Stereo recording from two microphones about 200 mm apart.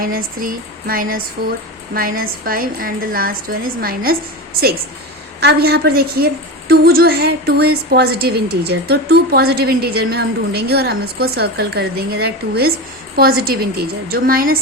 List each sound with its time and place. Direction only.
0.0 s a woman's voice: 45° right (ahead or behind)
5.4 s a woman's voice: 55° right (ahead or behind)